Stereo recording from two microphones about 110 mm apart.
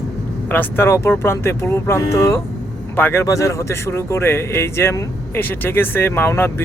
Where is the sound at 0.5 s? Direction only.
20° left (ahead or behind).